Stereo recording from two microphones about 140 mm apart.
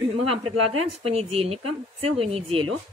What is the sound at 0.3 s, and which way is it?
A woman's voice, 45° right (ahead or behind).